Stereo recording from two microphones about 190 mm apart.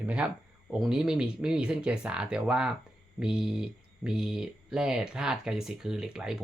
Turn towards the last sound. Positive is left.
turn(degrees=-5)  # may be behind; listen again after turning